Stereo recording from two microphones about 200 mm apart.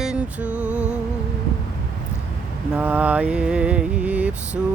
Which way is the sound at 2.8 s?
5° right (ahead or behind).